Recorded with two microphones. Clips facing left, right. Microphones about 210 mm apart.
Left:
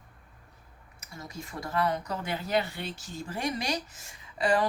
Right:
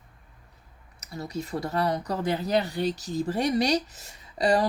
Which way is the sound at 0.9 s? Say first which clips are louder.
Right 9 dB; 35° right (ahead or behind).